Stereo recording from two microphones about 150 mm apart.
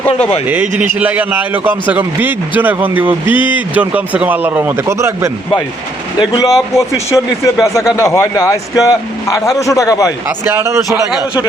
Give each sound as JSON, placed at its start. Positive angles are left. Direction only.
{"t": 0.4, "sound": "a man's voice", "side_deg": -10}
{"t": 6.1, "sound": "a man's voice", "side_deg": 25}
{"t": 10.2, "sound": "a man's voice", "side_deg": -15}